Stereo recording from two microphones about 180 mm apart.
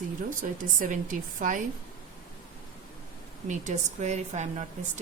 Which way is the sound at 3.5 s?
40° right (ahead or behind).